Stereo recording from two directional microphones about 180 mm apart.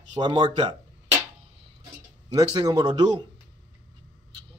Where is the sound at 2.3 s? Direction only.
20° right (ahead or behind).